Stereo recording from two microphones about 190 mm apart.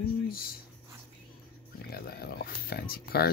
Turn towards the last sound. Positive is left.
turn(degrees=55)  # may be behind; listen again after turning